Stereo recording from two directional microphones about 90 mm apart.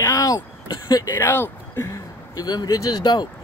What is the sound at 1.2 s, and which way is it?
Speech, 25° left (ahead or behind).